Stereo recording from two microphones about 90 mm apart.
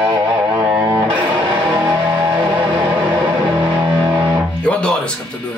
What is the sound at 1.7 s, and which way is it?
Music, 15° right (ahead or behind).